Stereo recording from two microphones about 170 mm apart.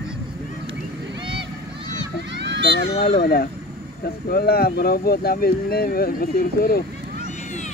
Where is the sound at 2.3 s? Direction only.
90° right.